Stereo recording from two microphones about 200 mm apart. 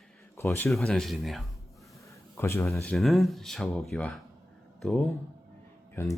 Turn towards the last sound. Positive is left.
turn(degrees=10)  # may be behind; listen again after turning